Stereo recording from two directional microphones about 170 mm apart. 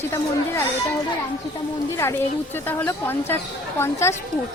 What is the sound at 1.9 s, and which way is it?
Speech, 15° left (ahead or behind).